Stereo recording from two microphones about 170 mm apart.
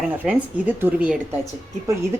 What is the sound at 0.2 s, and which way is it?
Speech, 10° right (ahead or behind).